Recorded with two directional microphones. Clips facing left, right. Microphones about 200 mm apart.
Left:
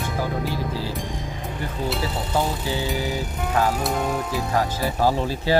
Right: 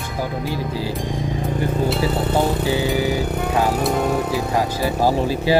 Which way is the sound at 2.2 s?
60° right (ahead or behind).